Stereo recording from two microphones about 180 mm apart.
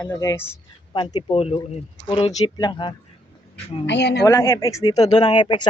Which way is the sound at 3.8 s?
75° left (ahead or behind).